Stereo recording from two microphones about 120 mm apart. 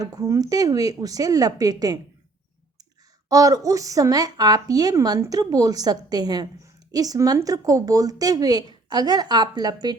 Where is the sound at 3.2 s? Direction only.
30° right (ahead or behind).